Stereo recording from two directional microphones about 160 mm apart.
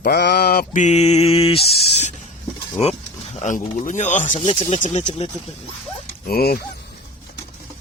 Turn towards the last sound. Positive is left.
turn(degrees=70)  # may be behind; listen again after turning